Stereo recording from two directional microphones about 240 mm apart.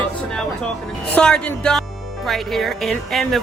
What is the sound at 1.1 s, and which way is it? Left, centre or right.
Speech, centre.